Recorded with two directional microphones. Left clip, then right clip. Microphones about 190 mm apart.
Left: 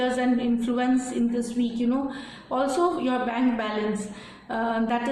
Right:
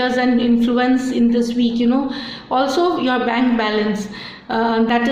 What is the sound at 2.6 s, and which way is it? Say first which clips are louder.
A woman's voice: right 7 dB; 40° right (ahead or behind).